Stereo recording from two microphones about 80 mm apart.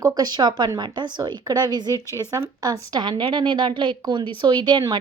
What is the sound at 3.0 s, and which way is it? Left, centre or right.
Speech, right.